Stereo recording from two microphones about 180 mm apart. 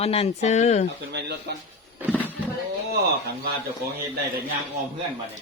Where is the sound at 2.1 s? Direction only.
10° left (ahead or behind).